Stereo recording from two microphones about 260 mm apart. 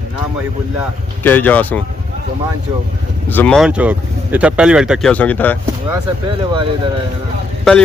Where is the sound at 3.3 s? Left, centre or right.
Centre.